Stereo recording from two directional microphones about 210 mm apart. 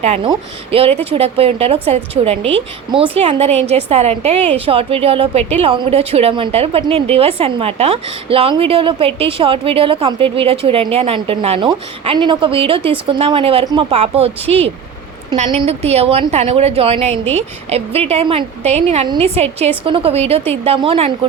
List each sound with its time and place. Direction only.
0.0 s a woman's voice: 30° right (ahead or behind)